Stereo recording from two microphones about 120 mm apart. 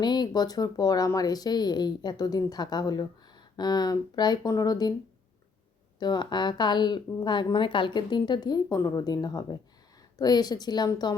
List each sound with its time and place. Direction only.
0.0 s a woman's voice: 35° left (ahead or behind)
6.0 s a woman's voice: 35° left (ahead or behind)